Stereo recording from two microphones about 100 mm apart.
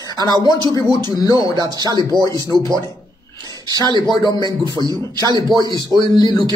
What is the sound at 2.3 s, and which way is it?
Speech, 30° left (ahead or behind).